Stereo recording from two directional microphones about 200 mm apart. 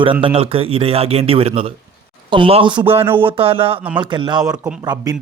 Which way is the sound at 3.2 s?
25° right (ahead or behind).